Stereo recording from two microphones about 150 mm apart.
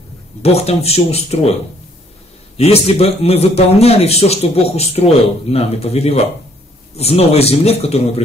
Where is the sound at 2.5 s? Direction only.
45° left (ahead or behind).